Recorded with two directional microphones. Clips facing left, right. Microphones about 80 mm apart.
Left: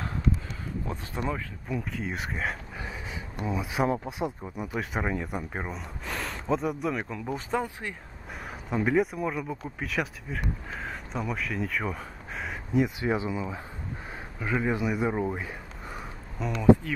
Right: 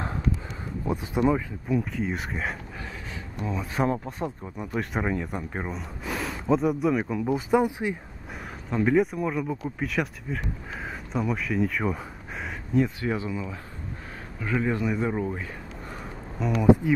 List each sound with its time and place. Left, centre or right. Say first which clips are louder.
0.8 s speech: right 10 dB; centre
1.7 s speech: right 6 dB; centre
8.6 s speech: right 3 dB; centre
12.7 s speech: right 1 dB; centre
16.3 s speech: right 5 dB; centre